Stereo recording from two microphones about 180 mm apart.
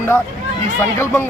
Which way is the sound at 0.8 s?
10° left (ahead or behind).